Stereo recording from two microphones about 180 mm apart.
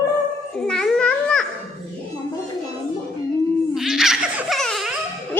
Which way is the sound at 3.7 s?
Centre (ahead or behind).